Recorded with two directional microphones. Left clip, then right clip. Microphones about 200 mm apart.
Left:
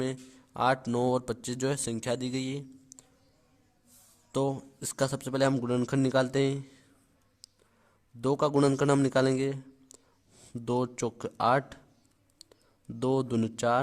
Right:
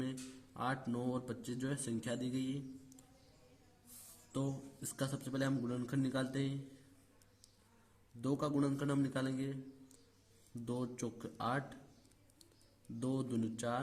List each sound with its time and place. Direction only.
0.0 s a man's voice: 50° left (ahead or behind)
4.3 s a man's voice: 55° left (ahead or behind)
8.2 s a man's voice: 50° left (ahead or behind)
10.7 s a man's voice: 50° left (ahead or behind)
13.0 s a man's voice: 50° left (ahead or behind)